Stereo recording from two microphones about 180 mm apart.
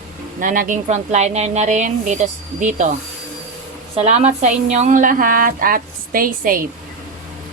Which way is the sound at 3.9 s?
35° right (ahead or behind).